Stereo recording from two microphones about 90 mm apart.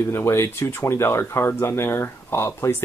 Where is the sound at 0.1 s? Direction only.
30° left (ahead or behind).